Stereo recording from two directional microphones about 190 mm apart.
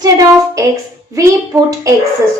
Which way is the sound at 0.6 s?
15° right (ahead or behind).